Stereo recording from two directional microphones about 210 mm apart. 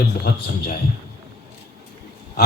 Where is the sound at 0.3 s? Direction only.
50° left (ahead or behind).